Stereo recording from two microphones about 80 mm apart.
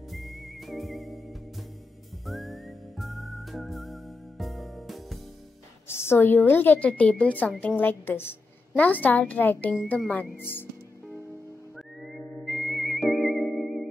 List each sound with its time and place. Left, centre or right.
0.1 s music: centre
2.2 s whistling: centre
5.9 s a woman's voice: left
12.0 s music: centre